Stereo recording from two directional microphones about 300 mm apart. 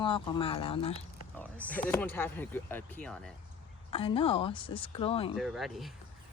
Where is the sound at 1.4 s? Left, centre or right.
Centre.